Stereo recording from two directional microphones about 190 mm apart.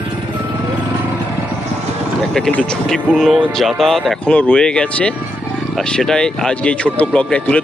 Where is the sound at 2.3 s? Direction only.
5° left (ahead or behind).